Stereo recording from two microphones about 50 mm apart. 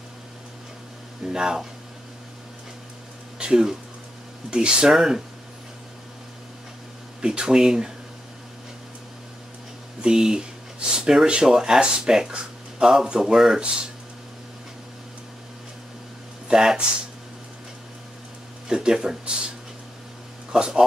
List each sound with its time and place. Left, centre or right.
1.2 s speech: centre
3.3 s speech: centre
7.2 s speech: centre
10.0 s speech: centre
16.4 s speech: centre
18.7 s speech: centre
20.5 s speech: centre